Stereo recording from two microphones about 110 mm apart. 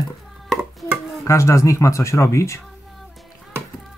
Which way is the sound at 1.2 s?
30° left (ahead or behind).